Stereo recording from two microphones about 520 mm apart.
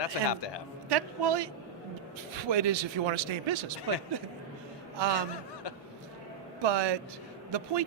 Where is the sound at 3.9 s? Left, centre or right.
Right.